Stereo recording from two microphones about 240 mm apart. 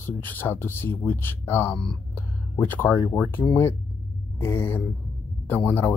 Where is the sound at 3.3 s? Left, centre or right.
Centre.